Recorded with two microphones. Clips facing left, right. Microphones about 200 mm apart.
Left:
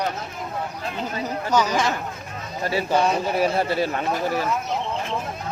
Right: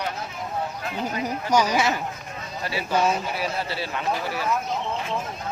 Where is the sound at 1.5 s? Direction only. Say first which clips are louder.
Even; 10° right (ahead or behind).